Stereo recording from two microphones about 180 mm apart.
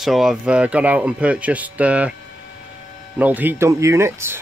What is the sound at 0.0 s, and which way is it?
Speech, centre (ahead or behind).